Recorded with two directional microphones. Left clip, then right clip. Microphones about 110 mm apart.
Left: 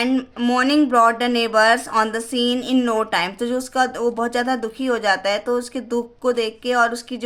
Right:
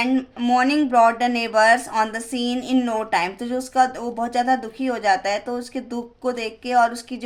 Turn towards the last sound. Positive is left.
turn(degrees=50)  # may be behind; listen again after turning